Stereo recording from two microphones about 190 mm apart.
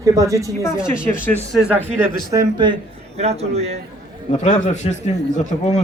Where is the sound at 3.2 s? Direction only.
35° right (ahead or behind).